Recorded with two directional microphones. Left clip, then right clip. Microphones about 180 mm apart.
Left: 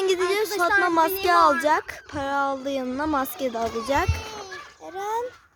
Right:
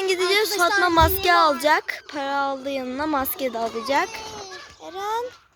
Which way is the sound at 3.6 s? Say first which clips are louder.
Right 1 dB; 30° left (ahead or behind).